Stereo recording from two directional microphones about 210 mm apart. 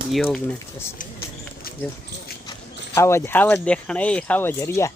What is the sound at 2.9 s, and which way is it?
Speech, 15° left (ahead or behind).